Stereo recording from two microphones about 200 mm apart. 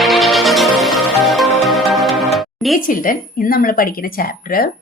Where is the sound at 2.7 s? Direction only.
45° left (ahead or behind).